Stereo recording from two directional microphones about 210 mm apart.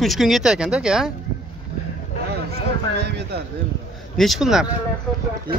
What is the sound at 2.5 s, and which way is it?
Speech, 50° right (ahead or behind).